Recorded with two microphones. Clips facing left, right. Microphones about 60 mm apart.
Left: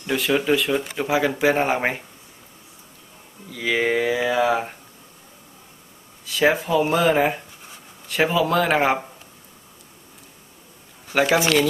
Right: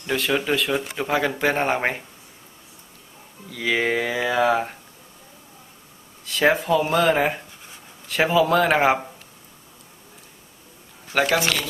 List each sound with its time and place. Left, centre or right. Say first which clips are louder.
0.0 s speech: left 2 dB; centre
3.4 s speech: left 1 dB; centre
6.2 s speech: even; centre
11.1 s speech: left 1 dB; centre